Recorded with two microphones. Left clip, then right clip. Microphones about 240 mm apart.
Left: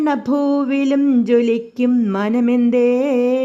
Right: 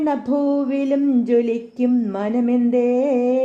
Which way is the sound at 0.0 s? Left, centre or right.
Left.